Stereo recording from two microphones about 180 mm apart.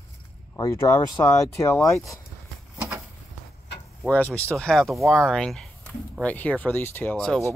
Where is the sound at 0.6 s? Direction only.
15° left (ahead or behind).